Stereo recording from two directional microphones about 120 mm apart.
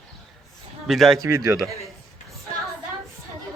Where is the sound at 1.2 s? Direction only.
25° right (ahead or behind).